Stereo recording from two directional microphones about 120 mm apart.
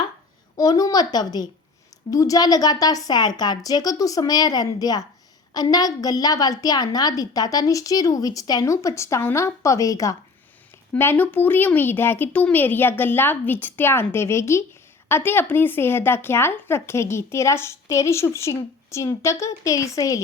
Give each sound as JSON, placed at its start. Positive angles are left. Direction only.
{"t": 0.5, "sound": "a woman's voice", "side_deg": 30}